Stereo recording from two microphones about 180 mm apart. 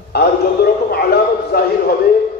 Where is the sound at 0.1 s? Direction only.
65° left (ahead or behind).